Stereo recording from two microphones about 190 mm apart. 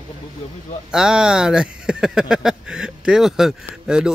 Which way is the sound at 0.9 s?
5° right (ahead or behind).